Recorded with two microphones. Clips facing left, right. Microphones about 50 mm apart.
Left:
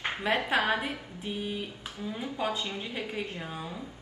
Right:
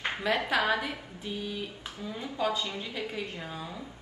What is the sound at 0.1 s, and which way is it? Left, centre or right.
A woman's voice, left.